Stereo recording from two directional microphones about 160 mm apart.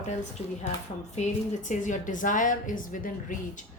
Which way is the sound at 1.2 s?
45° left (ahead or behind).